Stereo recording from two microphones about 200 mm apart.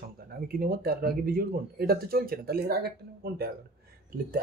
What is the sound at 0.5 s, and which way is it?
Speech, 45° right (ahead or behind).